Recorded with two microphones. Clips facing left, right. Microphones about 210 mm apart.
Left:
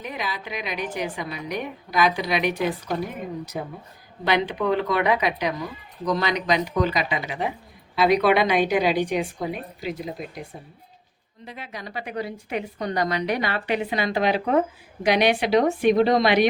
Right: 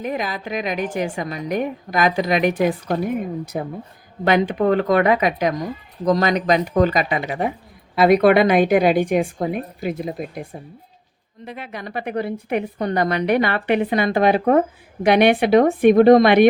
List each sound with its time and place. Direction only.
0.0 s a woman's voice: 45° right (ahead or behind)
4.2 s a woman's voice: 50° right (ahead or behind)
11.4 s a woman's voice: 55° right (ahead or behind)